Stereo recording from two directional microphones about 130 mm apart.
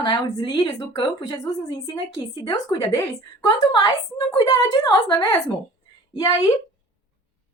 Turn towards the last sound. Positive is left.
turn(degrees=30)  # may be behind; listen again after turning